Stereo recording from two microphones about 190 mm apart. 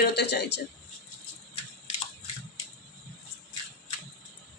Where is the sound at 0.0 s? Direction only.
60° left (ahead or behind).